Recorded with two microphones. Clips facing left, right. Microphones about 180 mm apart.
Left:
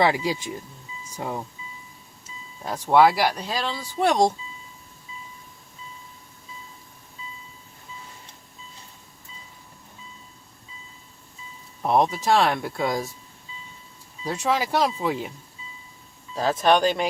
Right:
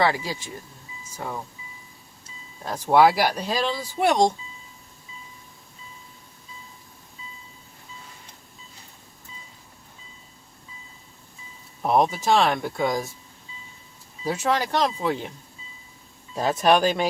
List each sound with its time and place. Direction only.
0.0 s speech: 15° left (ahead or behind)
2.6 s speech: centre (ahead or behind)
11.8 s speech: centre (ahead or behind)
14.3 s speech: centre (ahead or behind)
16.3 s speech: 10° right (ahead or behind)